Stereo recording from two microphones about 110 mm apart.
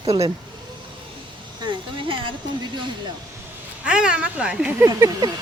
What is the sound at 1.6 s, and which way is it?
Speech, 45° right (ahead or behind).